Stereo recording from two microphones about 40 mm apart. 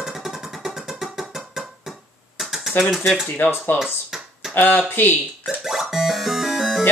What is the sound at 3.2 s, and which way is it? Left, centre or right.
Speech, left.